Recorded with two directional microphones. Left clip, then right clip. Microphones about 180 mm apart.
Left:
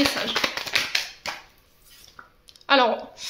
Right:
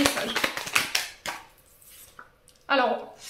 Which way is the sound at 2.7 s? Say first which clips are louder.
Left 4 dB; 40° left (ahead or behind).